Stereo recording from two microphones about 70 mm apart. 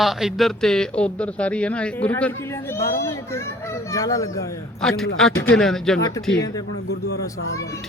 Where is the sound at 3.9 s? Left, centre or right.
Left.